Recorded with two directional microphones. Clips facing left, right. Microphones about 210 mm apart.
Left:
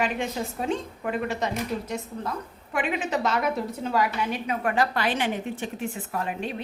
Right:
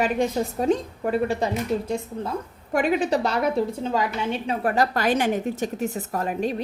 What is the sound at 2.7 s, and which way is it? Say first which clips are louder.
A woman's voice: right 6 dB; 40° right (ahead or behind).